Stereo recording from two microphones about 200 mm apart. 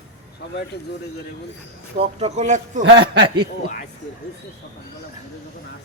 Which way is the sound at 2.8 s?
60° right (ahead or behind).